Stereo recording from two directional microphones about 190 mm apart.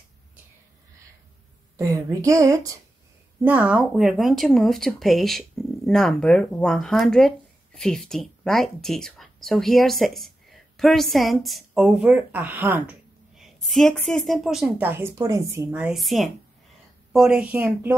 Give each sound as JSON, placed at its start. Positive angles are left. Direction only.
{"t": 1.8, "sound": "speech", "side_deg": -15}
{"t": 3.4, "sound": "speech", "side_deg": -5}
{"t": 13.7, "sound": "speech", "side_deg": 0}